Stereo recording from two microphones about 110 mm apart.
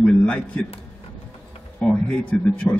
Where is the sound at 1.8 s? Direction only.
10° left (ahead or behind).